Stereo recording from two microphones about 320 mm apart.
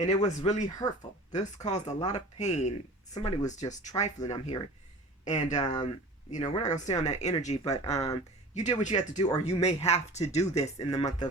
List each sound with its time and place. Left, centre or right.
0.0 s speech: left
8.5 s speech: left